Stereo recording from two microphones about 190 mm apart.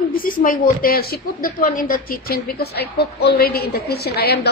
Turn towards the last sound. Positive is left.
turn(degrees=55)  # may be behind; listen again after turning